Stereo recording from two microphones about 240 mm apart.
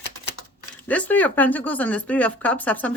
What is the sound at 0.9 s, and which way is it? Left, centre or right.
Speech, centre.